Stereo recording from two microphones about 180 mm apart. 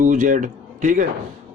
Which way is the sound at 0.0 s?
45° right (ahead or behind).